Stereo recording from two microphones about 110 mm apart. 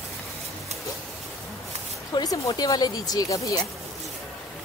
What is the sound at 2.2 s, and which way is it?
Speech, 35° left (ahead or behind).